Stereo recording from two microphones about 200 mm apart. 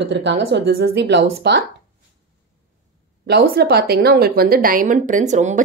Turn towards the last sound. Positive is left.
turn(degrees=-35)  # may be behind; listen again after turning